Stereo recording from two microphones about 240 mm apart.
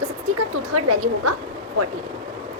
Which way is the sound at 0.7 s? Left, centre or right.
Right.